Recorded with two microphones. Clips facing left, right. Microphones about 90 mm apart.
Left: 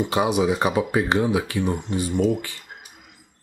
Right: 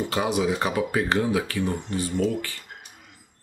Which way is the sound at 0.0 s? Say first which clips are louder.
Left 3 dB; 15° left (ahead or behind).